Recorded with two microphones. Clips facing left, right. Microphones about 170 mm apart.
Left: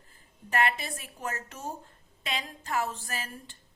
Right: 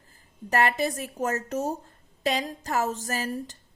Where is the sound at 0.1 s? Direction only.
40° right (ahead or behind).